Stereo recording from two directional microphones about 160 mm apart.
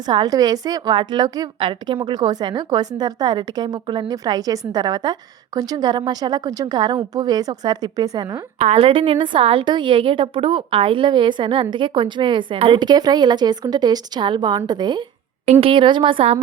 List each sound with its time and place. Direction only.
0.1 s a woman's voice: 25° right (ahead or behind)
8.5 s a woman's voice: 40° right (ahead or behind)